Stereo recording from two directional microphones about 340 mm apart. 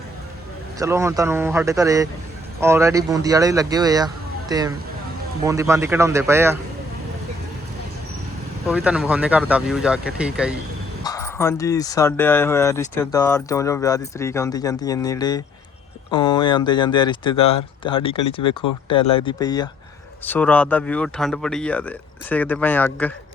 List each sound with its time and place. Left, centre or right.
0.8 s speech: centre
8.6 s speech: centre
11.0 s speech: centre